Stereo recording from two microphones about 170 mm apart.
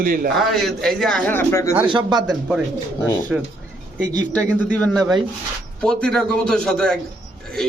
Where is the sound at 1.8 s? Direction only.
25° right (ahead or behind).